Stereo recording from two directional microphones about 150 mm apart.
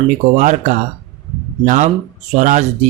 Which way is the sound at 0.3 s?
55° right (ahead or behind).